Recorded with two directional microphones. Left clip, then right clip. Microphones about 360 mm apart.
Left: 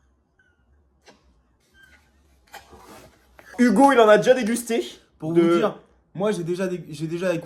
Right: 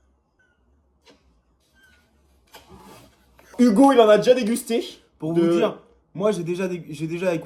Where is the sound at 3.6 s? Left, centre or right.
Centre.